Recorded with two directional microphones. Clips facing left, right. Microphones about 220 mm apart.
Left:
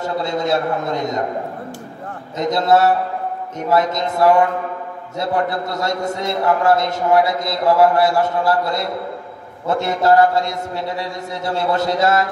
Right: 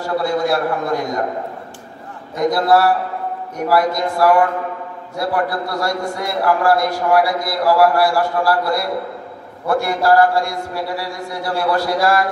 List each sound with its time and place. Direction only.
0.0 s a man's voice: 20° left (ahead or behind)
2.3 s a man's voice: 20° left (ahead or behind)